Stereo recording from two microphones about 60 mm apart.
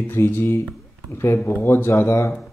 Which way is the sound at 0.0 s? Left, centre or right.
Left.